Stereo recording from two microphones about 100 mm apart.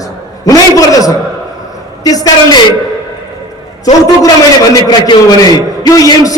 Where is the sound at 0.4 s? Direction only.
35° left (ahead or behind).